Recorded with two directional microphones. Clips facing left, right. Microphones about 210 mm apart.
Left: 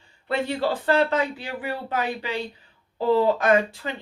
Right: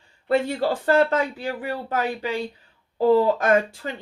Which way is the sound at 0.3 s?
45° right (ahead or behind).